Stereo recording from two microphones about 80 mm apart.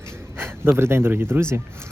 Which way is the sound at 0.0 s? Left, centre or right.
Right.